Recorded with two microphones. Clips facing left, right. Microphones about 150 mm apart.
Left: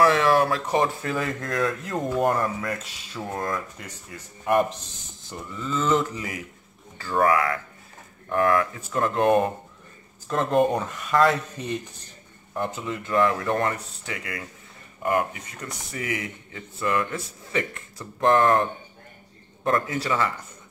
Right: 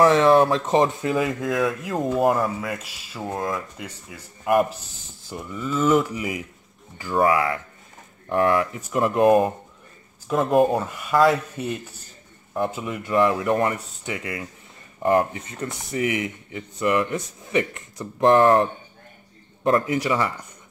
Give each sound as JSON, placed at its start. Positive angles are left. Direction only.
{"t": 0.0, "sound": "speech", "side_deg": -25}